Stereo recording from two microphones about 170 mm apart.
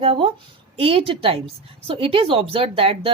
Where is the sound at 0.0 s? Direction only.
30° right (ahead or behind).